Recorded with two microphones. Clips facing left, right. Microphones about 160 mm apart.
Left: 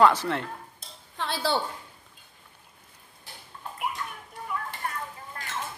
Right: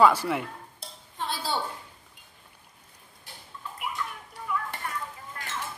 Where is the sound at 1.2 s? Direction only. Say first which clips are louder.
Left 3 dB; 75° left (ahead or behind).